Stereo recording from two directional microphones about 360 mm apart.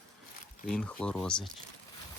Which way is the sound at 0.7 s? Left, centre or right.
Centre.